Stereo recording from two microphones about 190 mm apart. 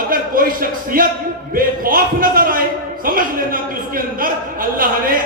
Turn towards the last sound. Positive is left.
turn(degrees=-50)  # may be behind; listen again after turning